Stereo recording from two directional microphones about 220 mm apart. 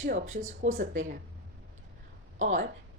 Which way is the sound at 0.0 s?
35° right (ahead or behind).